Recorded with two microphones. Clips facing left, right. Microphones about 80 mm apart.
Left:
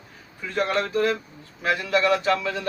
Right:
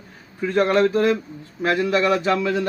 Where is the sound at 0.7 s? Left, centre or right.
Centre.